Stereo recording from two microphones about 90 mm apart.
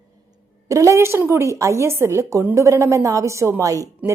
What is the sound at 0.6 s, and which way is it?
A woman's voice, 35° right (ahead or behind).